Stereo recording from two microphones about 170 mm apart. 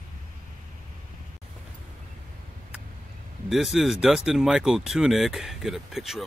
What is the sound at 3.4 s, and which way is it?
Speech, centre (ahead or behind).